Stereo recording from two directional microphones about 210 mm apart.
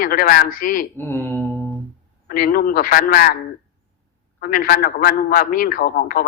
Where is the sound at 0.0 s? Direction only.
45° left (ahead or behind).